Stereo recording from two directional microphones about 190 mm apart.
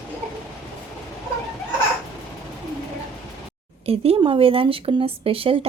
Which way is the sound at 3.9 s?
30° right (ahead or behind).